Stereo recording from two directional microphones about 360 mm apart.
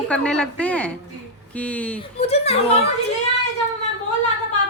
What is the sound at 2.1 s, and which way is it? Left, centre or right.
Speech, centre.